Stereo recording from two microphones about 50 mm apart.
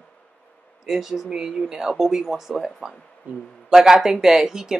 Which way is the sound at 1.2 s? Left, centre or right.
Centre.